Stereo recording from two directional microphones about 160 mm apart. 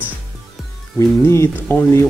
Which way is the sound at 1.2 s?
15° left (ahead or behind).